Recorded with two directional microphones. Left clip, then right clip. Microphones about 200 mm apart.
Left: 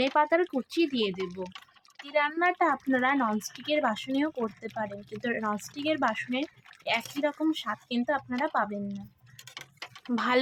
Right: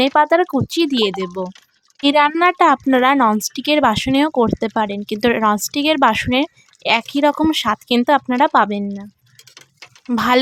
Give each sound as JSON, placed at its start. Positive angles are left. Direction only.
{"t": 0.0, "sound": "speech", "side_deg": -45}
{"t": 10.1, "sound": "speech", "side_deg": -45}